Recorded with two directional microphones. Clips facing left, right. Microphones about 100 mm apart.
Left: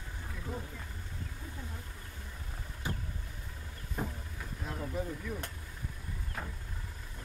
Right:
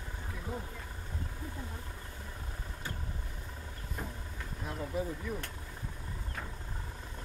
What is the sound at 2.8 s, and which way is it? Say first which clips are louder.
Vehicle: left 4 dB; 15° left (ahead or behind).